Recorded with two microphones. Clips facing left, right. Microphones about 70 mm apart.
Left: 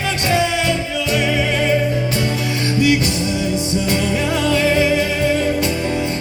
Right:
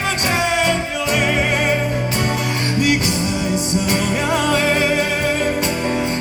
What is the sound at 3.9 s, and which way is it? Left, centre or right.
Music, right.